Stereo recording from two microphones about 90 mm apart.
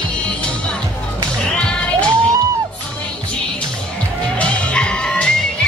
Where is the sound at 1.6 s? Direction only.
10° left (ahead or behind).